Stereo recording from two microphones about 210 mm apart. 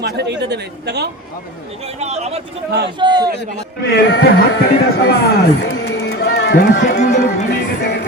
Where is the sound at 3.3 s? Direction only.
55° left (ahead or behind).